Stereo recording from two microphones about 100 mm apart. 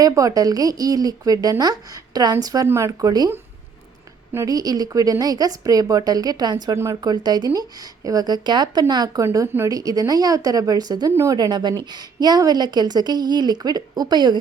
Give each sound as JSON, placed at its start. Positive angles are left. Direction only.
{"t": 0.0, "sound": "a woman's voice", "side_deg": -35}
{"t": 4.4, "sound": "a woman's voice", "side_deg": -40}
{"t": 11.1, "sound": "a woman's voice", "side_deg": -30}
{"t": 11.3, "sound": "a woman's voice", "side_deg": -45}